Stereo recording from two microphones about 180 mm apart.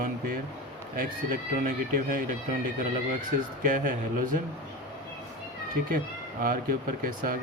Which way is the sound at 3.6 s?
50° right (ahead or behind).